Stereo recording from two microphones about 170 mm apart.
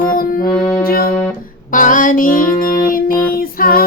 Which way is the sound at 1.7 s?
50° left (ahead or behind).